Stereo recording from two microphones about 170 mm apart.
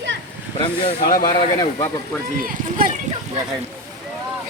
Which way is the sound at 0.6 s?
30° left (ahead or behind).